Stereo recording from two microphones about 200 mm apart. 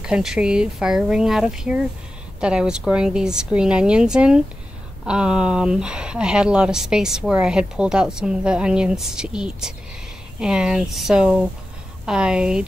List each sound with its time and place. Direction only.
0.0 s speech: 5° right (ahead or behind)